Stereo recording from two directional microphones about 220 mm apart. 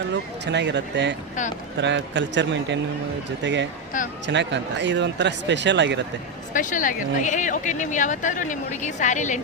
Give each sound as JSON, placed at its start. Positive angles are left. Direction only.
{"t": 0.1, "sound": "speech", "side_deg": -50}
{"t": 3.9, "sound": "a woman's voice", "side_deg": 35}
{"t": 4.3, "sound": "speech", "side_deg": -55}
{"t": 6.5, "sound": "a woman's voice", "side_deg": 35}